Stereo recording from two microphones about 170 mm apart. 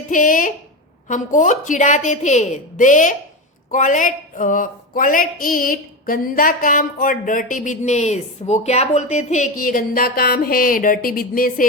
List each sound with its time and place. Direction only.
0.1 s speech: 50° left (ahead or behind)